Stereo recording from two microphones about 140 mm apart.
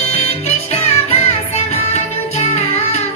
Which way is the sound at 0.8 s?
50° left (ahead or behind).